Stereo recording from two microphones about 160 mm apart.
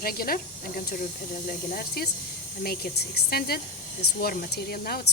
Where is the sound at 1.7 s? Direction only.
75° left (ahead or behind).